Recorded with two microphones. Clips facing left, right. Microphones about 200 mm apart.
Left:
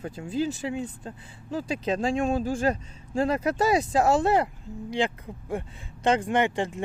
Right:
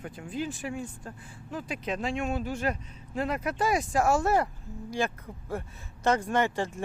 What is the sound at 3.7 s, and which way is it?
Speech, 20° left (ahead or behind).